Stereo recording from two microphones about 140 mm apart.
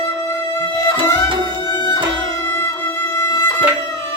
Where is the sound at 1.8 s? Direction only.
30° left (ahead or behind).